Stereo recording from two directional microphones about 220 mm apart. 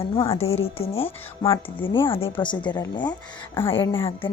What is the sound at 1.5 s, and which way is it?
Speech, 10° left (ahead or behind).